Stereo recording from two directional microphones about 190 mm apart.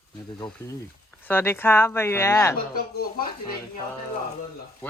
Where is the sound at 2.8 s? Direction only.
50° left (ahead or behind).